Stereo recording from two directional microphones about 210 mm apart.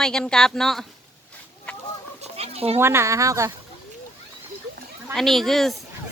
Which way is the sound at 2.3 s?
30° right (ahead or behind).